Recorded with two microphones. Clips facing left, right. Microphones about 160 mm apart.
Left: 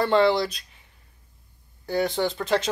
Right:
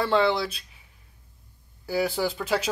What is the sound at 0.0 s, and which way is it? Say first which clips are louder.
Speech: left 3 dB; centre (ahead or behind).